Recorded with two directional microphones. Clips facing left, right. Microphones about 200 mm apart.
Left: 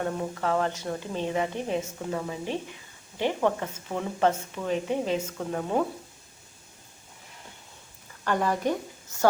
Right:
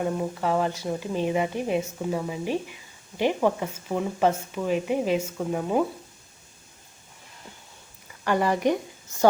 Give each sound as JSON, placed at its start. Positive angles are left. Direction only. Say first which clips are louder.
{"t": 0.0, "sound": "speech", "louder": "right 3 dB", "side_deg": -10}
{"t": 8.2, "sound": "speech", "louder": "right 3 dB", "side_deg": -10}